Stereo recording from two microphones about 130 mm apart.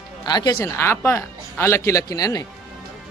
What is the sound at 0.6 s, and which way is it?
Speech, 20° left (ahead or behind).